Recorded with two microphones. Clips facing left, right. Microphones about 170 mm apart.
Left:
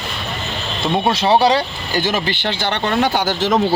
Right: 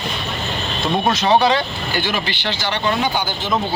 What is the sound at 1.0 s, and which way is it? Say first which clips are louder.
Speech: left 1 dB; 30° left (ahead or behind).